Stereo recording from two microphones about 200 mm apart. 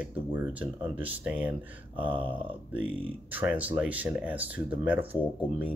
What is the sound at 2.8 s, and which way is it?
Speech, 10° right (ahead or behind).